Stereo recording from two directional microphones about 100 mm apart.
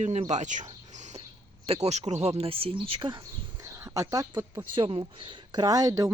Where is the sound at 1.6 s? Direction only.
85° right; by 3.2 s 60° right (ahead or behind).